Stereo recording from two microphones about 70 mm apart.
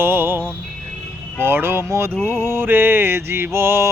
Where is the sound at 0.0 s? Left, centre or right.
Right.